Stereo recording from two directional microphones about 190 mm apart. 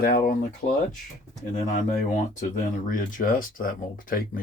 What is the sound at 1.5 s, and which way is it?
Speech, 45° left (ahead or behind).